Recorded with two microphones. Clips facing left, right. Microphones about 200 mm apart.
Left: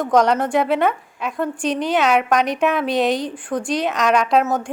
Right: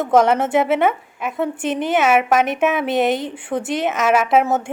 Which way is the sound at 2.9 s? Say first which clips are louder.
Right 1 dB; 20° right (ahead or behind).